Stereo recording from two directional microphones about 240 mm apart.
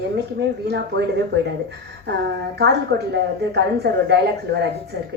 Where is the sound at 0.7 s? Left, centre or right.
Right.